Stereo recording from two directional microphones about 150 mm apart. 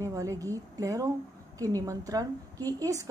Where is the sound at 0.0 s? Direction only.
20° right (ahead or behind).